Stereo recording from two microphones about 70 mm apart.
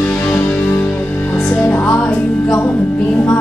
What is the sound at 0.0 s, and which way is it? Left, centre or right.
Music, centre.